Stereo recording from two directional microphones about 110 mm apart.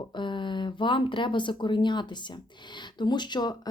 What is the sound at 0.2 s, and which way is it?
A woman's voice, 45° left (ahead or behind).